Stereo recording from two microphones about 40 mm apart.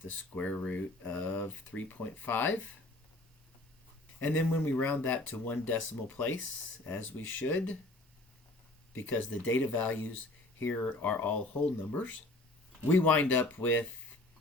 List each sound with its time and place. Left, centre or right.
0.1 s speech: left
4.2 s speech: left
4.8 s speech: left
6.9 s speech: left
8.9 s speech: left
9.3 s speech: left
11.2 s speech: left